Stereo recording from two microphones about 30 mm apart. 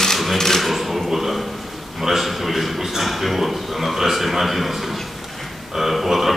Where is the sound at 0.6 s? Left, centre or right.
Centre.